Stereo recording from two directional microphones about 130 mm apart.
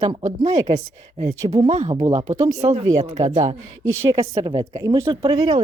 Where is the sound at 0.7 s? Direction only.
55° right (ahead or behind).